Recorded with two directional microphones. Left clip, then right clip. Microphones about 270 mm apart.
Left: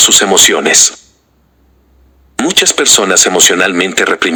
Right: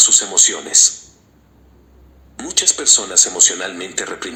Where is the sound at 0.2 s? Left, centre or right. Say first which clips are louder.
Left 9 dB; left.